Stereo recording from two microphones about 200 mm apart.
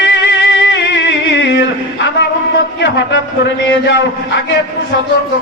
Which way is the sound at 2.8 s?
65° left (ahead or behind).